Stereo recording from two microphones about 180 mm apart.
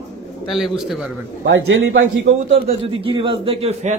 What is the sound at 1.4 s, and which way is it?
Speech, 75° right (ahead or behind).